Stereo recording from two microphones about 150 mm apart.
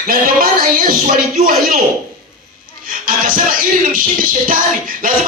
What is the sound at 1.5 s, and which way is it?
Speech, 70° right (ahead or behind).